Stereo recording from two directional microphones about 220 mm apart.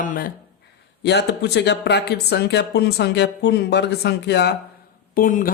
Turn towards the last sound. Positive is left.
turn(degrees=40)  # may be behind; listen again after turning